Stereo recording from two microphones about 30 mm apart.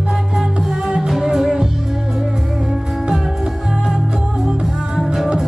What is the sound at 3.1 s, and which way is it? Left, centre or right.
Music, centre.